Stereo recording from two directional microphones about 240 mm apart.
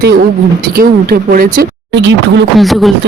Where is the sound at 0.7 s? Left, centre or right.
Right.